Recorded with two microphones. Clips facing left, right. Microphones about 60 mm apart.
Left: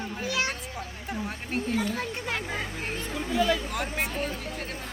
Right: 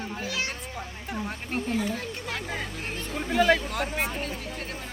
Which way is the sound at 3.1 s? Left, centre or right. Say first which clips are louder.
Right 4 dB; right.